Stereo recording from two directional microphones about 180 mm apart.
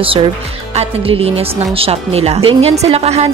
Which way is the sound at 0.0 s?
30° right (ahead or behind).